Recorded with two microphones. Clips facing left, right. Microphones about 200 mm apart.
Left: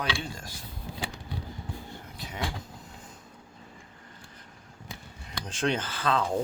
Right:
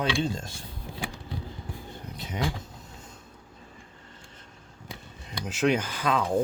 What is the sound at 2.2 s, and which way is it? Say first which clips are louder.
Speech: right 5 dB; 20° right (ahead or behind).